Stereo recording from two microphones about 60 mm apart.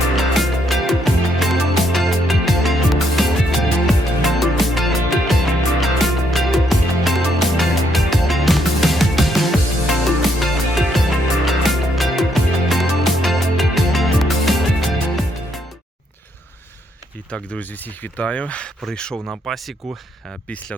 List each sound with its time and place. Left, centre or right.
0.2 s music: centre
17.3 s speech: left
18.2 s speech: centre
19.1 s speech: right